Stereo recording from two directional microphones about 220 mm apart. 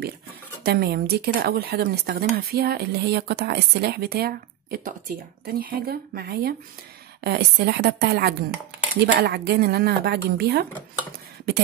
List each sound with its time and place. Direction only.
0.7 s speech: 45° right (ahead or behind)